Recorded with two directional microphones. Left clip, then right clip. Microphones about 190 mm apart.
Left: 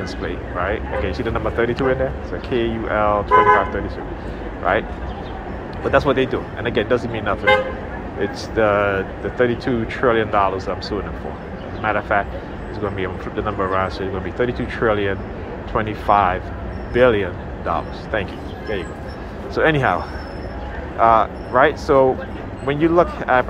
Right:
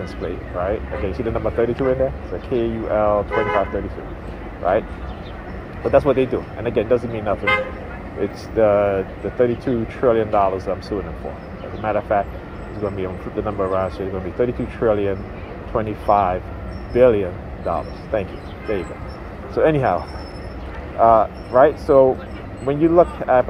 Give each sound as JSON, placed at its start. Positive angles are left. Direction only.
{"t": 0.6, "sound": "speech", "side_deg": -50}
{"t": 5.9, "sound": "speech", "side_deg": -50}
{"t": 19.5, "sound": "speech", "side_deg": -50}